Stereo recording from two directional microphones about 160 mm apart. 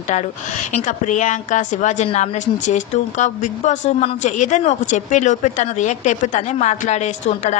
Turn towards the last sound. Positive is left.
turn(degrees=45)  # may be behind; listen again after turning